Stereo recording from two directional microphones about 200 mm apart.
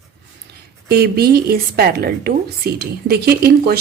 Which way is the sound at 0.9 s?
50° right (ahead or behind).